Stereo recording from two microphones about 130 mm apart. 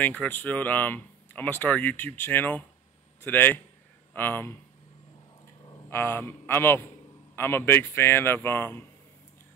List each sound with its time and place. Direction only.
0.0 s speech: 10° left (ahead or behind)
5.9 s speech: 15° left (ahead or behind)